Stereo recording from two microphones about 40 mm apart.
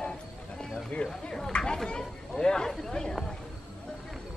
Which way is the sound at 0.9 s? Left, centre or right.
Left.